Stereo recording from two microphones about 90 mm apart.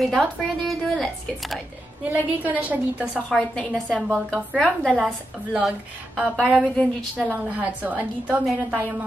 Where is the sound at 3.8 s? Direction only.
5° left (ahead or behind).